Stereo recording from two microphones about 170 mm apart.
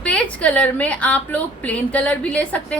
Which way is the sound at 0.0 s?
5° left (ahead or behind).